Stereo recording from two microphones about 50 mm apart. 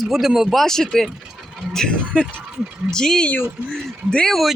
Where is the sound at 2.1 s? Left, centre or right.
Left.